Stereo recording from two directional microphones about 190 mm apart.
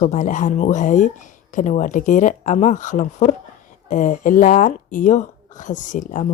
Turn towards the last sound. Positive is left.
turn(degrees=40)  # may be behind; listen again after turning